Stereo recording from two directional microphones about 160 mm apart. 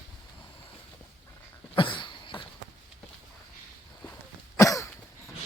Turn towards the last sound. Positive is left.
turn(degrees=20)  # may be behind; listen again after turning